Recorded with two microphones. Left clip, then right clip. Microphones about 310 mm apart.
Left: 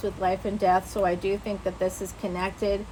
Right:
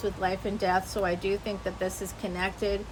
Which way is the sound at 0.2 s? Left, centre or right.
Centre.